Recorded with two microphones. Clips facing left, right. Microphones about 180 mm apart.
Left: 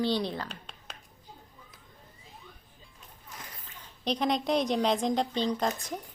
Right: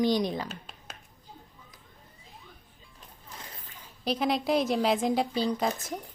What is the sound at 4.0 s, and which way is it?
A woman's voice, 5° right (ahead or behind).